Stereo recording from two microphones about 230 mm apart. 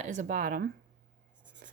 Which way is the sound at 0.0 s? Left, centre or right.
Right.